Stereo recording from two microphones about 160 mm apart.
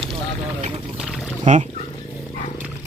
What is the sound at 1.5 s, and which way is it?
Speech, 50° right (ahead or behind).